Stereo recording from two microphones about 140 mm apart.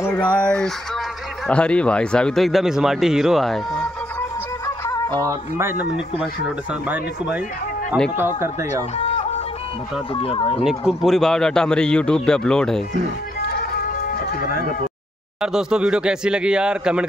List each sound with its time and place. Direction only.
0.0 s a sound: 15° left (ahead or behind)
0.4 s speech: 5° left (ahead or behind)
4.6 s music: 20° left (ahead or behind)
5.2 s speech: 20° right (ahead or behind)
8.4 s speech: 20° right (ahead or behind)
10.1 s speech: 40° left (ahead or behind)
10.9 s speech: centre (ahead or behind)
13.5 s music: 90° left
15.4 s speech: 5° right (ahead or behind)